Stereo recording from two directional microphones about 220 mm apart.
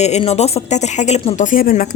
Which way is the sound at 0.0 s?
30° left (ahead or behind).